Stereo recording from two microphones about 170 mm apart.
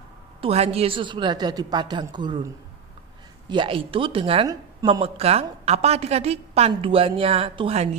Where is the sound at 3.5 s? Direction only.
30° right (ahead or behind).